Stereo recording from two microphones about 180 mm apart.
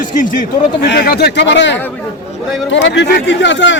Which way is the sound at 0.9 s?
60° left (ahead or behind).